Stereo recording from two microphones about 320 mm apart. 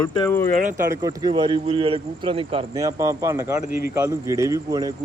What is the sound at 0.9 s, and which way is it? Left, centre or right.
A man's voice, centre.